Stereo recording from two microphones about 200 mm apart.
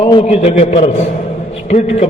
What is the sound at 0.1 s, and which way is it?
A man's voice, 30° left (ahead or behind).